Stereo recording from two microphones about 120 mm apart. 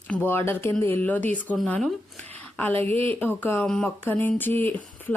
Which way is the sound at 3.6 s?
5° left (ahead or behind).